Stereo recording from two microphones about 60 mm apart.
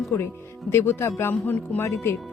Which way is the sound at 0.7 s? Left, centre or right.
Left.